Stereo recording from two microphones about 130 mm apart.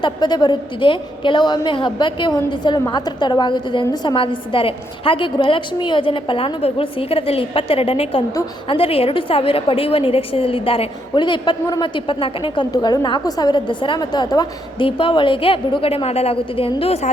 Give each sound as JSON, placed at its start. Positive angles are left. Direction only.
{"t": 0.0, "sound": "a woman's voice", "side_deg": 35}
{"t": 12.7, "sound": "a woman's voice", "side_deg": 30}